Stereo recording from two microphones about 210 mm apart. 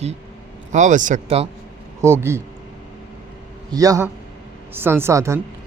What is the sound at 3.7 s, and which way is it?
Speech, 15° right (ahead or behind).